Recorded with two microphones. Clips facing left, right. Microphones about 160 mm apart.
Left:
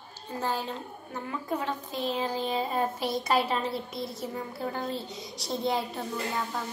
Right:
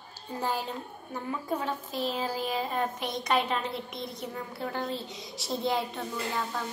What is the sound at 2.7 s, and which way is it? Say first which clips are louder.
A woman's voice: left 2 dB; 5° left (ahead or behind).